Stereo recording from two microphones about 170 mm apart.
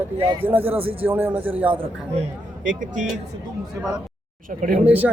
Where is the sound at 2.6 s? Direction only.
50° right (ahead or behind).